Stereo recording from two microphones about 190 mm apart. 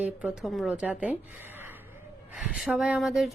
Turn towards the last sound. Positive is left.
turn(degrees=0)  # may be behind; listen again after turning